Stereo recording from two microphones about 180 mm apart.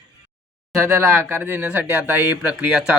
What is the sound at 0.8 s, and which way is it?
Speech, 15° right (ahead or behind).